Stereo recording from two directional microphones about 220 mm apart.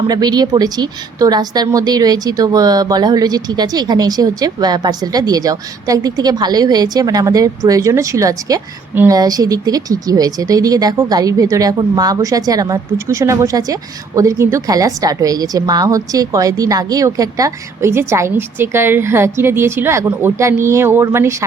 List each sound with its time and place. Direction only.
0.1 s a woman's voice: 20° right (ahead or behind)